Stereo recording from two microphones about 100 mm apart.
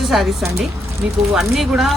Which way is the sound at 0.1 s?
5° right (ahead or behind).